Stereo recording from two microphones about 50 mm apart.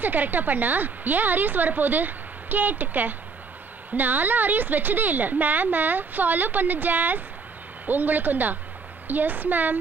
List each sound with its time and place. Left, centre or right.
0.0 s a woman's voice: right